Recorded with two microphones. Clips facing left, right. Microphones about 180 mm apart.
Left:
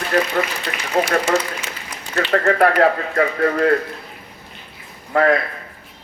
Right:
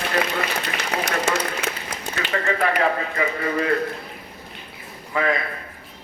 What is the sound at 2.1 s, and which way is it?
Speech, 60° left (ahead or behind).